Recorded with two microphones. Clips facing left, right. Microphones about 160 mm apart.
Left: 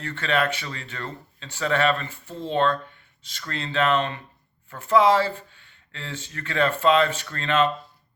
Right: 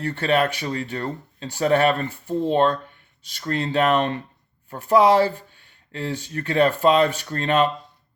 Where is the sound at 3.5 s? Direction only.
40° right (ahead or behind).